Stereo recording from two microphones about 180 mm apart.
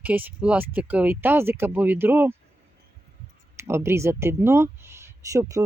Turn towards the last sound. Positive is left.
turn(degrees=-20)  # may be behind; listen again after turning